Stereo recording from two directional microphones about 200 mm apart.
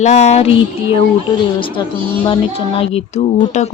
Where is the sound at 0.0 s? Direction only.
35° left (ahead or behind).